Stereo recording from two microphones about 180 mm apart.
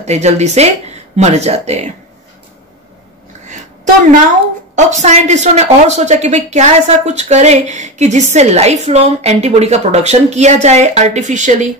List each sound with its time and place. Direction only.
0.0 s a woman's voice: 40° right (ahead or behind)
4.7 s speech: 40° right (ahead or behind)